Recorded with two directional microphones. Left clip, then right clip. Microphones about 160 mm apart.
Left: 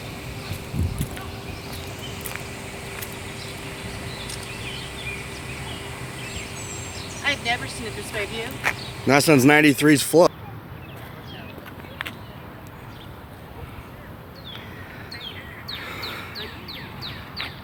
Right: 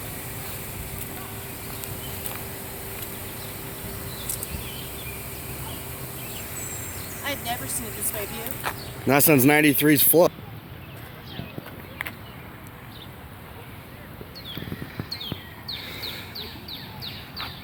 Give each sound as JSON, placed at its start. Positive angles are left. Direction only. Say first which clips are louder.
{"t": 2.5, "sound": "vehicle", "louder": "left 3 dB", "side_deg": -70}
{"t": 3.8, "sound": "a sound", "louder": "left 3 dB", "side_deg": -80}
{"t": 7.1, "sound": "speech", "louder": "left 7 dB", "side_deg": -65}
{"t": 8.6, "sound": "speech", "louder": "left 4 dB", "side_deg": -5}
{"t": 15.9, "sound": "bird", "louder": "left 2 dB", "side_deg": 0}